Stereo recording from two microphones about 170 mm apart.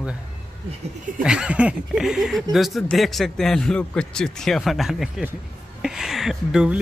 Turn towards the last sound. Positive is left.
turn(degrees=-5)  # may be behind; listen again after turning